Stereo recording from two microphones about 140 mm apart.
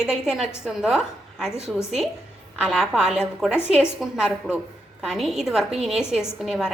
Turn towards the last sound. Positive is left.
turn(degrees=-5)  # may be behind; listen again after turning